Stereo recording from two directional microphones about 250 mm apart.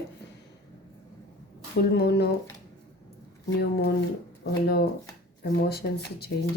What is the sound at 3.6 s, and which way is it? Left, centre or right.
Speech, left.